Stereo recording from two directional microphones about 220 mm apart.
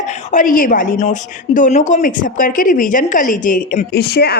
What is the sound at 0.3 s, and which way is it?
A man's voice, 35° left (ahead or behind).